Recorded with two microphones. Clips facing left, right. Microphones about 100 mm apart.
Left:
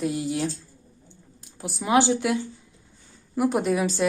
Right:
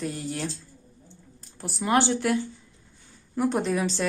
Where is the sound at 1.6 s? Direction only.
Centre (ahead or behind).